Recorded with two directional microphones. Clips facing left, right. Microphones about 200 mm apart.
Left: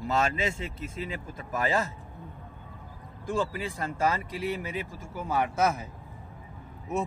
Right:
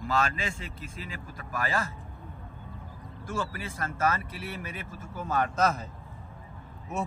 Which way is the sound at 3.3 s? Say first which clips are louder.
Left 5 dB; 15° left (ahead or behind).